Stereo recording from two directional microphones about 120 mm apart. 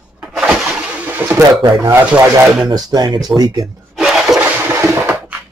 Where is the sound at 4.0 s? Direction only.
5° right (ahead or behind).